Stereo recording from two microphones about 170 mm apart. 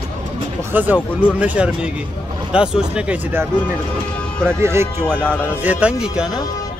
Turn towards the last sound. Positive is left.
turn(degrees=-5)  # may be behind; listen again after turning